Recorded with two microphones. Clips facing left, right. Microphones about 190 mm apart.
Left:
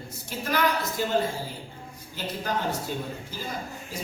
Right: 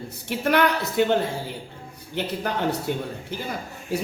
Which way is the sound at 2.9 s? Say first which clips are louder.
Right 5 dB; 65° right (ahead or behind).